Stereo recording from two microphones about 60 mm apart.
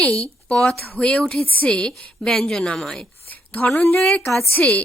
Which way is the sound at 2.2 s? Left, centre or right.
Centre.